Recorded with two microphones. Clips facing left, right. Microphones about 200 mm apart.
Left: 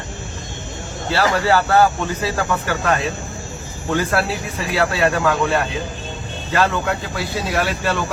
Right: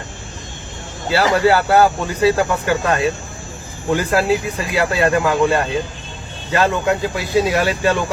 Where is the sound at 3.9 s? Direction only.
15° right (ahead or behind).